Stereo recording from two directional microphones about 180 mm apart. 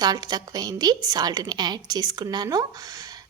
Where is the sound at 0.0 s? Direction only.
20° right (ahead or behind).